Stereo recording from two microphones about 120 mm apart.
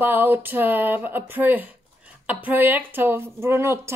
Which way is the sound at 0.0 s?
15° right (ahead or behind).